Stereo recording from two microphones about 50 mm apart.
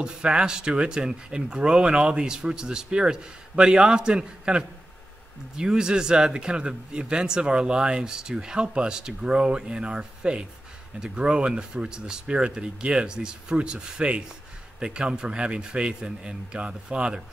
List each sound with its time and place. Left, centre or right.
0.0 s a man's voice: centre